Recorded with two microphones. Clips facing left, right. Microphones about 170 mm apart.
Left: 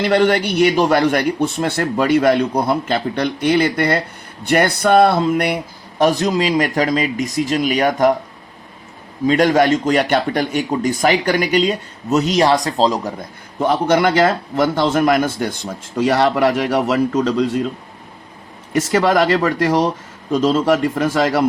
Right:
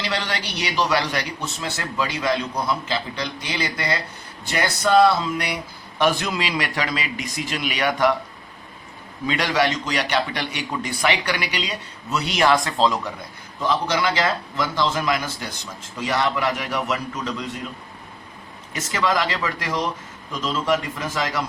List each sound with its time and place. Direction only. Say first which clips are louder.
0.0 s a man's voice: left 13 dB; 55° left (ahead or behind)
6.0 s speech: left 6 dB; 40° left (ahead or behind)
9.2 s a man's voice: left 8 dB; 45° left (ahead or behind)
13.6 s a man's voice: left 7 dB; 55° left (ahead or behind)
18.7 s a man's voice: left 8 dB; 60° left (ahead or behind)